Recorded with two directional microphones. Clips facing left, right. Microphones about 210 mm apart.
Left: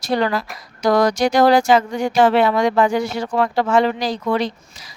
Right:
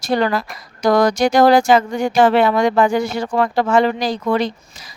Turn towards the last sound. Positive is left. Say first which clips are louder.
# right 2 dB
turn(degrees=-50)  # may be behind; listen again after turning